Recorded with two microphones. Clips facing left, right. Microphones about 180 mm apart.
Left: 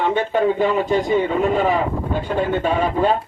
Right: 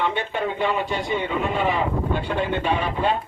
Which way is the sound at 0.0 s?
45° left (ahead or behind).